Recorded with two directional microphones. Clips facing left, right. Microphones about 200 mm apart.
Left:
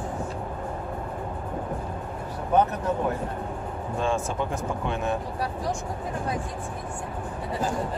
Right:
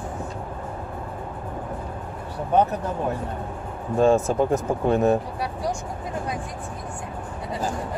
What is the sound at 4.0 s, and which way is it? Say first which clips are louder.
Speech: right 9 dB; 40° right (ahead or behind).